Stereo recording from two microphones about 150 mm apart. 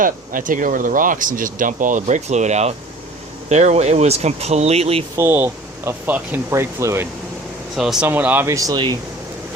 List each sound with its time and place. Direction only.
0.0 s speech: 65° right (ahead or behind); by 5.0 s 45° right (ahead or behind)
5.1 s speech: 15° right (ahead or behind)
7.8 s speech: 5° right (ahead or behind); by 9.0 s 30° right (ahead or behind)